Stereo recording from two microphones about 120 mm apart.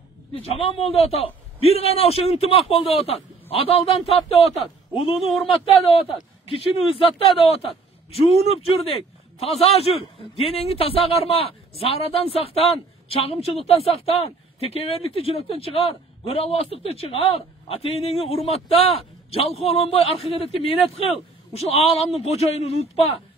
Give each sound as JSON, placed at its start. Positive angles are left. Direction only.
{"t": 0.3, "sound": "a man's voice", "side_deg": 50}